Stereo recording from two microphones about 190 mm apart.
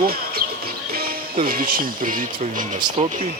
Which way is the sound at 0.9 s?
50° right (ahead or behind).